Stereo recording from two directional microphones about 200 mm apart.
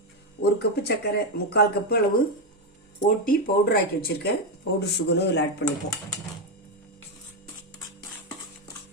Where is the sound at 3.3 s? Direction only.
45° left (ahead or behind).